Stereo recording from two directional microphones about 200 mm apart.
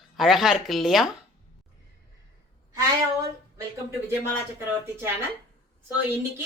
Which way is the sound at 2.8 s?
15° right (ahead or behind).